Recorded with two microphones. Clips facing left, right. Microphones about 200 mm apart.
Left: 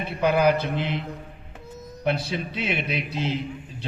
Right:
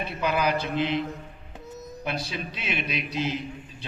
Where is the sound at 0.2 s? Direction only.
55° left (ahead or behind).